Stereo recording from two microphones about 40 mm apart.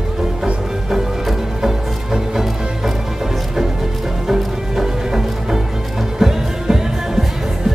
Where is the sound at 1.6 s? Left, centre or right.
Centre.